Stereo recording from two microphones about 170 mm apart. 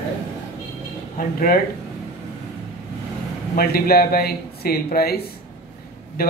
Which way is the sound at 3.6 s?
65° left (ahead or behind).